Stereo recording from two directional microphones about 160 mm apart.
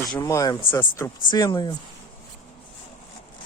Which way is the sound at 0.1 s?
20° left (ahead or behind).